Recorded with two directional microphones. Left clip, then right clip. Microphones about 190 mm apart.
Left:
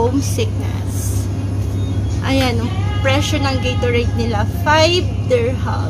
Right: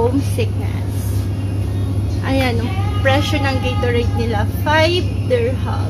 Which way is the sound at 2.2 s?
10° left (ahead or behind).